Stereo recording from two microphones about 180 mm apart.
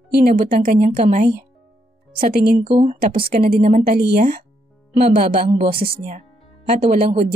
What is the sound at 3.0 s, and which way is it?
A woman's voice, 55° right (ahead or behind).